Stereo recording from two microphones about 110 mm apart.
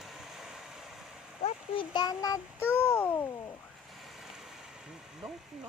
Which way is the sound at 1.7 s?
40° left (ahead or behind).